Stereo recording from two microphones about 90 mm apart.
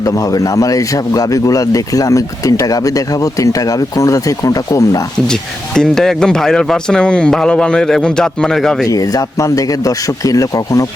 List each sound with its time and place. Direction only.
0.0 s a man's voice: 40° left (ahead or behind)
5.3 s speech: 5° left (ahead or behind)
8.9 s a man's voice: 40° left (ahead or behind)